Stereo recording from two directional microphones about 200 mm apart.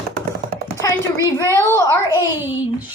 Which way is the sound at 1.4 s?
15° left (ahead or behind).